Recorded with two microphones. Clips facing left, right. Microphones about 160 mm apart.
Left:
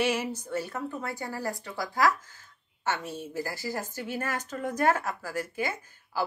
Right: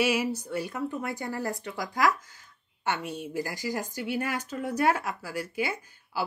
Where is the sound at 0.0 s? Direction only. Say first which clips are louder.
Right 2 dB; 10° right (ahead or behind).